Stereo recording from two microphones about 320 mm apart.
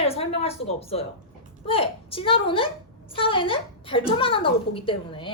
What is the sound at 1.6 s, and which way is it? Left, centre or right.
A woman's voice, centre.